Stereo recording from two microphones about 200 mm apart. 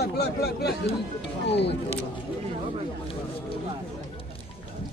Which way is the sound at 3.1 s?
25° left (ahead or behind).